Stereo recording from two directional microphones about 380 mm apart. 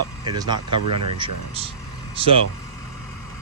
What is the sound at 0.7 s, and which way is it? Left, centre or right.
Speech, right.